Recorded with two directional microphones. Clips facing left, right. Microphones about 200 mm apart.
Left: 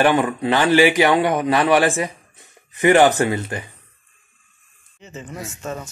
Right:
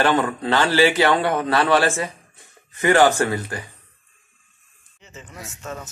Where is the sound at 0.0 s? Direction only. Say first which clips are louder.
Left 3 dB; 15° left (ahead or behind).